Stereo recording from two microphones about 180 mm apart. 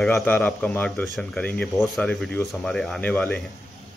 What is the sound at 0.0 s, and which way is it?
Speech, 5° left (ahead or behind).